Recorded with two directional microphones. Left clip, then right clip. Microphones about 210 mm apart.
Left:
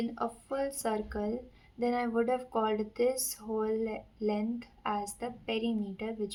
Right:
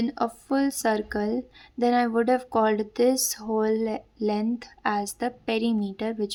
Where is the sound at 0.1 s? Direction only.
45° right (ahead or behind).